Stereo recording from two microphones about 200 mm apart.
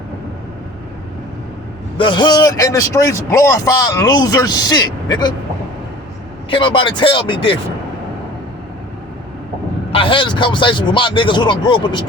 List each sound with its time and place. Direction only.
2.0 s a man's voice: 20° left (ahead or behind)
6.5 s a man's voice: 25° left (ahead or behind)
9.9 s a man's voice: 25° left (ahead or behind)